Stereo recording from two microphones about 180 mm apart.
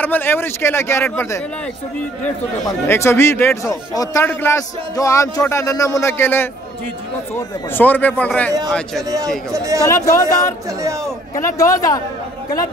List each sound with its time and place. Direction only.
0.0 s a man's voice: 10° left (ahead or behind)
2.6 s a man's voice: 15° left (ahead or behind)
9.5 s a man's voice: 20° right (ahead or behind)
9.8 s a man's voice: 15° left (ahead or behind)